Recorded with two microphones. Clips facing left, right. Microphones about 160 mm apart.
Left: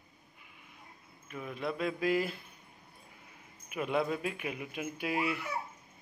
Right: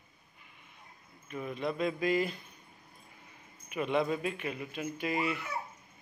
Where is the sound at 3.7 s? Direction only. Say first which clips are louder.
Right 2 dB; 5° left (ahead or behind).